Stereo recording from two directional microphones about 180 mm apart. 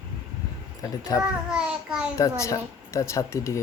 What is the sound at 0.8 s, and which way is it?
Speech, 20° left (ahead or behind).